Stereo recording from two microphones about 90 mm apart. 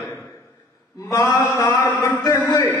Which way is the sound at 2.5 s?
45° left (ahead or behind).